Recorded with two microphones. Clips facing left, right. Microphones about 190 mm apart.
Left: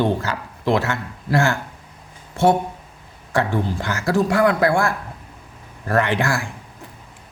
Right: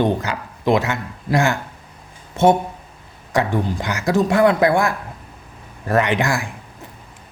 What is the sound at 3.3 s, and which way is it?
Speech, 15° right (ahead or behind).